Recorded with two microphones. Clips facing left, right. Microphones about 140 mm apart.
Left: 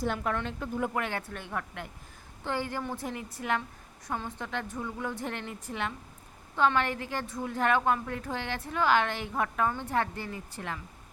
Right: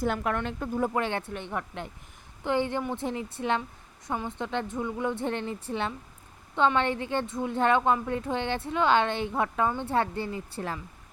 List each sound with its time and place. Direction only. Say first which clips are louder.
0.0 s speech: right 3 dB; 55° right (ahead or behind)
0.8 s a woman's voice: right 4 dB; 30° right (ahead or behind)